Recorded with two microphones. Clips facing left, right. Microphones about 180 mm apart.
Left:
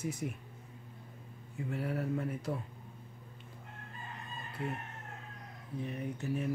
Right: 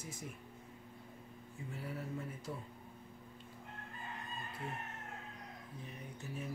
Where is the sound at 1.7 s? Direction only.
65° left (ahead or behind).